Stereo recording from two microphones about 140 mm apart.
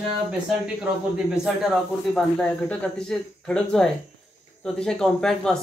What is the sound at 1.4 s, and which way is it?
Speech, centre (ahead or behind).